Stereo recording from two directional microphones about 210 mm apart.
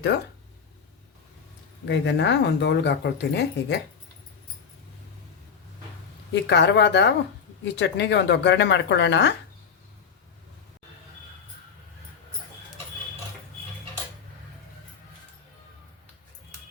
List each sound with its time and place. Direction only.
0.1 s speech: 50° left (ahead or behind)
1.8 s speech: 55° left (ahead or behind)
6.3 s speech: 55° left (ahead or behind)